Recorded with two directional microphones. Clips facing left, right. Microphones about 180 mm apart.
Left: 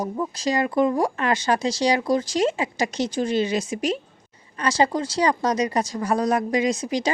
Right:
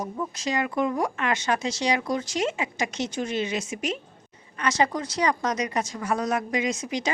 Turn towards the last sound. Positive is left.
turn(degrees=35)  # may be behind; listen again after turning